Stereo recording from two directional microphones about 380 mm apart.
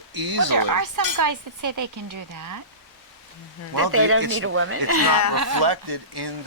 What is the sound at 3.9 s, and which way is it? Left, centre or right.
Speech, right.